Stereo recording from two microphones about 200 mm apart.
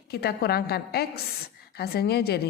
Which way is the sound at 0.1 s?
50° left (ahead or behind).